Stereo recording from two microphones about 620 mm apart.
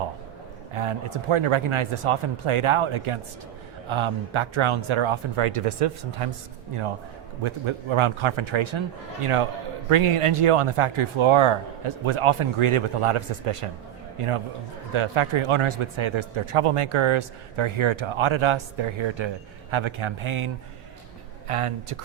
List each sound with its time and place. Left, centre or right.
0.7 s speech: right
7.4 s speech: right
14.9 s speech: right